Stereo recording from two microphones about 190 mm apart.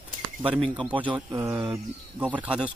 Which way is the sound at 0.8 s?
5° right (ahead or behind).